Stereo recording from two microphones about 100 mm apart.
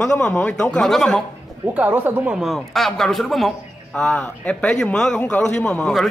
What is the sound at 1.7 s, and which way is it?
Speech, 20° right (ahead or behind).